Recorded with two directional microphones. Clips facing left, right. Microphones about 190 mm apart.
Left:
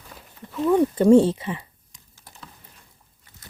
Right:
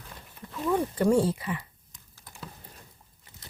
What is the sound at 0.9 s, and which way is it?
Speech, 25° left (ahead or behind).